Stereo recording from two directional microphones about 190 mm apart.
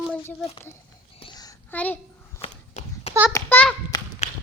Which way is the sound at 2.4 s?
35° left (ahead or behind).